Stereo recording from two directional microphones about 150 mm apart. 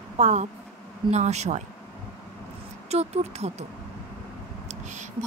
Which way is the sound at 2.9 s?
45° right (ahead or behind).